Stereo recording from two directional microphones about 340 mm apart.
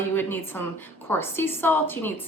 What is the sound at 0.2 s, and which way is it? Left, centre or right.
A woman's voice, centre.